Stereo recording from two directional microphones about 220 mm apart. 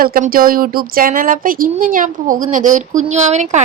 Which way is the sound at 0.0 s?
40° right (ahead or behind).